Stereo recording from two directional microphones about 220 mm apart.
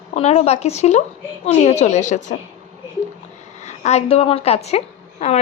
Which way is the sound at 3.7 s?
30° left (ahead or behind).